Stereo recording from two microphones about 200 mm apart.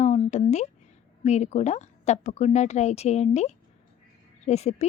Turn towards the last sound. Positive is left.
turn(degrees=35)  # may be behind; listen again after turning